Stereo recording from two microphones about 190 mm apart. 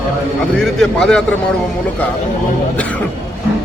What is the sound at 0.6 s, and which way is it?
Speech, centre (ahead or behind).